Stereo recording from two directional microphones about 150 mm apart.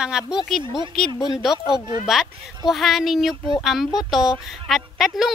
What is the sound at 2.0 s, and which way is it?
Speech, centre (ahead or behind).